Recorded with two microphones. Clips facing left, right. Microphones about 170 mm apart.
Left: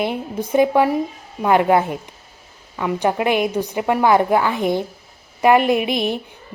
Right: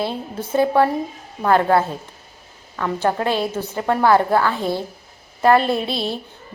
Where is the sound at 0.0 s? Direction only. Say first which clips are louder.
Left 3 dB; 15° left (ahead or behind).